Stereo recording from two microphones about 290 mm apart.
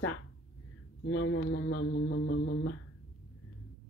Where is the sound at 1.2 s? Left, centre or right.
Left.